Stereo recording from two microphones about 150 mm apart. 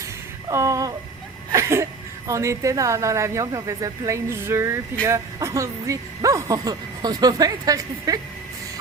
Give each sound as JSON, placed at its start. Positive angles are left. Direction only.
{"t": 0.4, "sound": "a woman's voice", "side_deg": -20}